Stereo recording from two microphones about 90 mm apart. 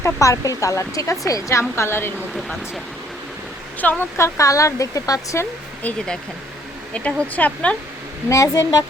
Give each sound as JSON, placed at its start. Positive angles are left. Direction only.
{"t": 0.0, "sound": "a woman's voice", "side_deg": 35}
{"t": 2.3, "sound": "speech", "side_deg": 0}
{"t": 3.8, "sound": "a woman's voice", "side_deg": 20}
{"t": 4.2, "sound": "a woman's voice", "side_deg": 35}
{"t": 6.9, "sound": "speech", "side_deg": 15}
{"t": 8.3, "sound": "a woman's voice", "side_deg": 35}